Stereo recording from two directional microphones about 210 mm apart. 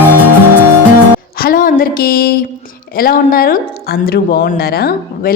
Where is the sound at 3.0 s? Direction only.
45° left (ahead or behind).